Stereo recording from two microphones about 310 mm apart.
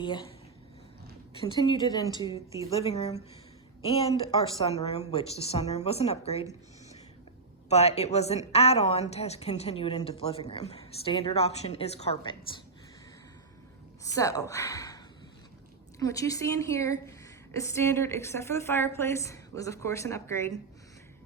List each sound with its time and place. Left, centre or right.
0.0 s a woman's voice: centre
1.4 s a woman's voice: centre
7.7 s a woman's voice: centre
14.0 s a woman's voice: centre